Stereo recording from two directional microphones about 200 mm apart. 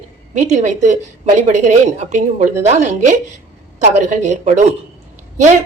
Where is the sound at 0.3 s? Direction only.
35° right (ahead or behind).